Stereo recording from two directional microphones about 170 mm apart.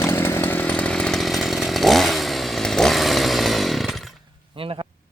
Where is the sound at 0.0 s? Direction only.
15° left (ahead or behind).